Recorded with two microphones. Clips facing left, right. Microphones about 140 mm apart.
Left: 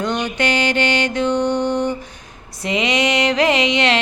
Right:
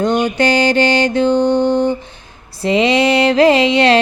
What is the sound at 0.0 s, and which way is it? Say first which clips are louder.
Music: right 6 dB; 30° right (ahead or behind).